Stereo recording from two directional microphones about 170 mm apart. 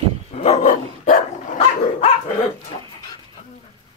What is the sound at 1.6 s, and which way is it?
Dog, 35° left (ahead or behind).